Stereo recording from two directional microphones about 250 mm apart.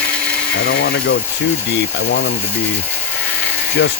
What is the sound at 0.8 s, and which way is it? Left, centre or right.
Speech, left.